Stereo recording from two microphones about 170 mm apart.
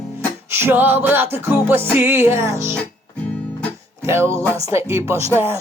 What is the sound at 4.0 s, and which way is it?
Music, 15° right (ahead or behind).